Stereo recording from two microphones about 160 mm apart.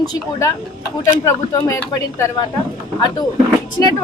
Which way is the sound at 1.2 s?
20° left (ahead or behind).